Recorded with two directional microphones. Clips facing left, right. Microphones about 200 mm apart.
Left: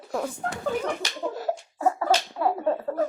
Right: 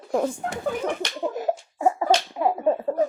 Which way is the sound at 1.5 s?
15° right (ahead or behind).